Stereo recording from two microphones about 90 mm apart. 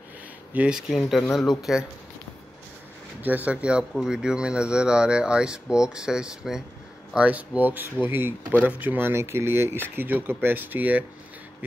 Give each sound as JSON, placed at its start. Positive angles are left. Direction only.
{"t": 0.5, "sound": "speech", "side_deg": -10}
{"t": 3.2, "sound": "speech", "side_deg": -20}